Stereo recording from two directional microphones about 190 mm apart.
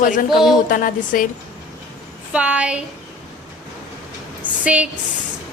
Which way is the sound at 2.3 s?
5° right (ahead or behind).